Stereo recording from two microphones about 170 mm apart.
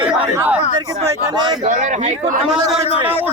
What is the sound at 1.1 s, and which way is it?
Speech, 25° right (ahead or behind).